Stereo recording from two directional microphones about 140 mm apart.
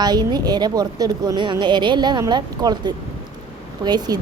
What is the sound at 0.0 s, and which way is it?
A woman's voice, 30° right (ahead or behind).